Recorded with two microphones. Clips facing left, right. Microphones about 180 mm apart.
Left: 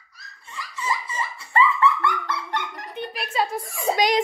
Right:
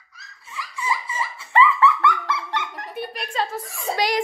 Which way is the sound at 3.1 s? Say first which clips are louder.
Left 3 dB; 5° left (ahead or behind).